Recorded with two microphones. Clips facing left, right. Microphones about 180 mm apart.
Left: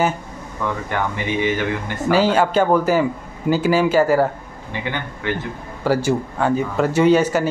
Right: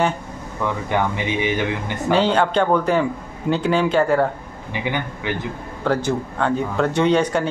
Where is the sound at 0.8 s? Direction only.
15° right (ahead or behind).